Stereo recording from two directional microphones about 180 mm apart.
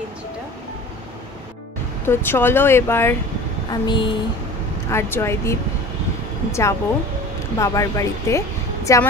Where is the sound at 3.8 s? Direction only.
25° left (ahead or behind).